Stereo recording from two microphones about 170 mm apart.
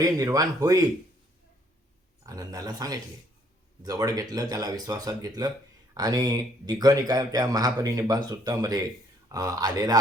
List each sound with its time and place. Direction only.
0.0 s speech: 20° right (ahead or behind)
2.2 s speech: 20° right (ahead or behind)